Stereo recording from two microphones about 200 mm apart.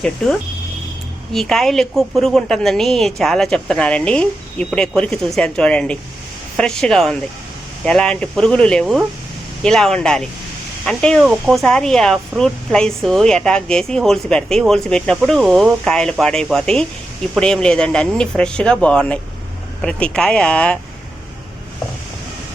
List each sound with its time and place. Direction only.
1.3 s a woman's voice: centre (ahead or behind)